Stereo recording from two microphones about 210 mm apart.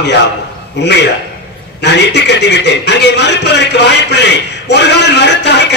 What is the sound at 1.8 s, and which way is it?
A man's voice, 55° left (ahead or behind).